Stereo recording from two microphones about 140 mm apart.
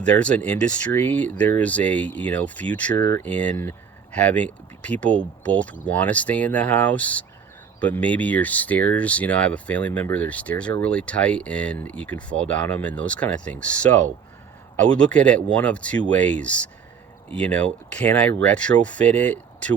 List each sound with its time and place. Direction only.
0.0 s speech: 10° left (ahead or behind)
14.8 s speech: 10° left (ahead or behind)